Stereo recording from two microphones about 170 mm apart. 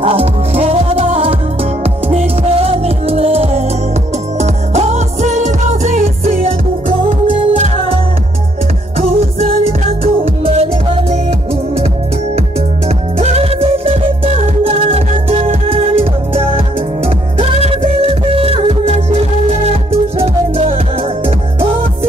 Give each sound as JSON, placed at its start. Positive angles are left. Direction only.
{"t": 0.0, "sound": "music", "side_deg": -35}
{"t": 12.8, "sound": "music", "side_deg": -40}
{"t": 17.4, "sound": "music", "side_deg": -35}